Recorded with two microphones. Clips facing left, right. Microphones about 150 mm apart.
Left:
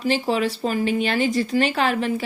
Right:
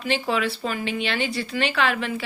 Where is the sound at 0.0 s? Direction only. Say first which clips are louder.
Left 3 dB; 40° left (ahead or behind).